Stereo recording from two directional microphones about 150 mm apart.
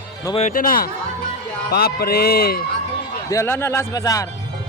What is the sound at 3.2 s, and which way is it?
Speech, 20° left (ahead or behind).